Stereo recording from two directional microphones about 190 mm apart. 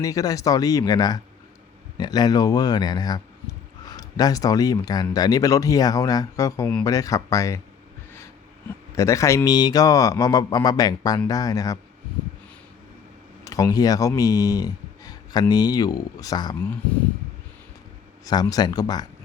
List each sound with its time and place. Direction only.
0.0 s speech: 20° left (ahead or behind)
9.0 s speech: 15° left (ahead or behind)
13.4 s speech: 20° left (ahead or behind)
18.3 s speech: 20° left (ahead or behind)